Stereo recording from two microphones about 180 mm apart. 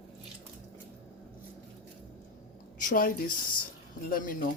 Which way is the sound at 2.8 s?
50° left (ahead or behind).